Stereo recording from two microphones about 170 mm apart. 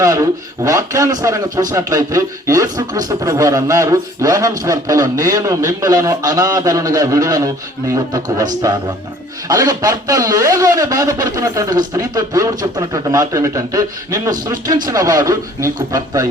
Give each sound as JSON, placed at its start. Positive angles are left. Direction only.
{"t": 0.0, "sound": "speech", "side_deg": -20}
{"t": 9.5, "sound": "speech", "side_deg": -20}